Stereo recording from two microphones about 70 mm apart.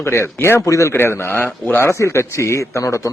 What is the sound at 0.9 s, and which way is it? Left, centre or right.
A man's voice, left.